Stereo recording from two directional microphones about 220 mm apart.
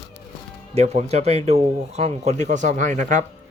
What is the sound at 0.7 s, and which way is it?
Speech, 30° right (ahead or behind).